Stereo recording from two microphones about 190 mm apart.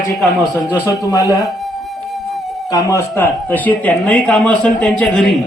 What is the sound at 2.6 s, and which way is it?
Speech, 15° left (ahead or behind).